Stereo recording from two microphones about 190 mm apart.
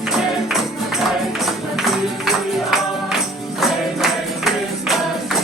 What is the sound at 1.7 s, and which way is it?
Music, centre (ahead or behind).